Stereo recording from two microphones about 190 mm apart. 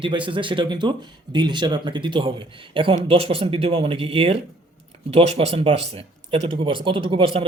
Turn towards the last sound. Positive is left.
turn(degrees=-30)  # may be behind; listen again after turning